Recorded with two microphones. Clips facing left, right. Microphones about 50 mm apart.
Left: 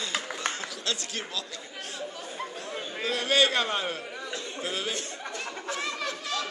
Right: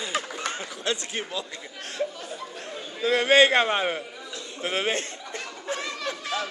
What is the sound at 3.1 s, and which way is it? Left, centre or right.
A man's voice, right.